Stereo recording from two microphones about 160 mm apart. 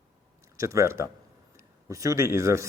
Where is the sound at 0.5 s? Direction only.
20° right (ahead or behind).